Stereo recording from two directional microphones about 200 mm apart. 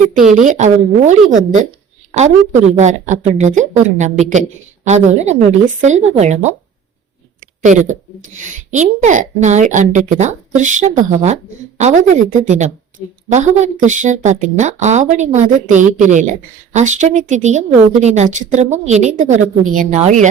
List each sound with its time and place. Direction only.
0.3 s a woman's voice: 35° right (ahead or behind)
2.1 s a woman's voice: 35° right (ahead or behind)
7.6 s a woman's voice: 40° right (ahead or behind)